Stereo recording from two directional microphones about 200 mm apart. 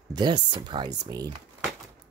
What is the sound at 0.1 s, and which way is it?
Speech, 20° right (ahead or behind).